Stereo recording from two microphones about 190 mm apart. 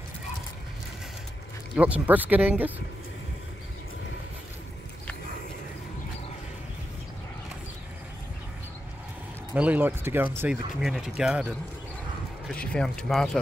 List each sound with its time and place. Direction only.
1.8 s speech: 10° right (ahead or behind)
9.5 s speech: 10° right (ahead or behind)
12.5 s speech: 5° left (ahead or behind)